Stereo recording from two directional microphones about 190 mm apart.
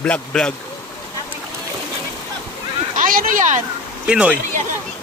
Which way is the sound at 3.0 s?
45° right (ahead or behind).